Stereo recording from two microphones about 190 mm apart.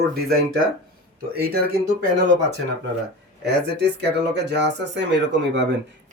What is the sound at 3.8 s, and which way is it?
Speech, 60° right (ahead or behind).